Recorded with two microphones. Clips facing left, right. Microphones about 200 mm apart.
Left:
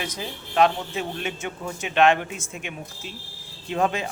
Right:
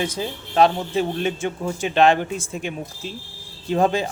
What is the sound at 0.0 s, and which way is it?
A man's voice, 30° right (ahead or behind).